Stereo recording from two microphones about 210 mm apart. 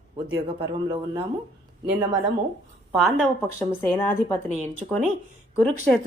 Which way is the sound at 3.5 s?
10° left (ahead or behind).